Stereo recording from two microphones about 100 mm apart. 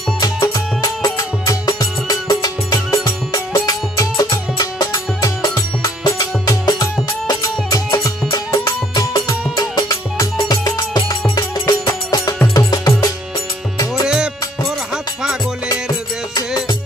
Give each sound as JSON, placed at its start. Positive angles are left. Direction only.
{"t": 0.2, "sound": "music", "side_deg": 35}